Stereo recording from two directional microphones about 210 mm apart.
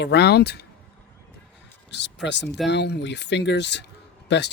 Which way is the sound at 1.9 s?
55° left (ahead or behind).